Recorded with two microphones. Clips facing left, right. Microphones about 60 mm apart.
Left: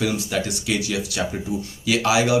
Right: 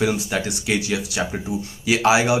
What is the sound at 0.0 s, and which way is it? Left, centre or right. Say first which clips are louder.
Speech: right 2 dB; right.